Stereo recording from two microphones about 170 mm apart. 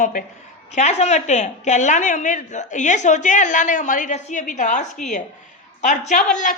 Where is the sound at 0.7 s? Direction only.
40° left (ahead or behind).